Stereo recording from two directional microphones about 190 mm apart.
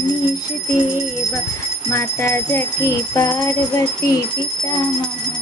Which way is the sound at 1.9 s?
15° left (ahead or behind).